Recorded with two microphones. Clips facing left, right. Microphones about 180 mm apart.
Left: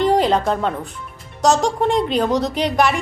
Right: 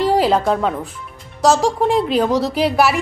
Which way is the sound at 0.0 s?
5° right (ahead or behind).